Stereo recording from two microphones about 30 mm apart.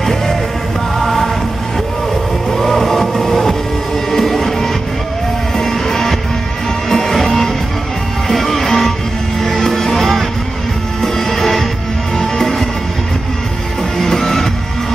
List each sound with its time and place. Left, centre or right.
0.0 s music: centre
2.5 s music: centre
13.9 s music: centre